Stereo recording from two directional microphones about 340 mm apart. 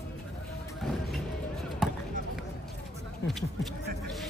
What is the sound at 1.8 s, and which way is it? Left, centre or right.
Basketball bounce, centre.